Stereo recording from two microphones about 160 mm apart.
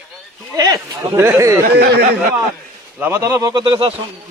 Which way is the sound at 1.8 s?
75° right (ahead or behind).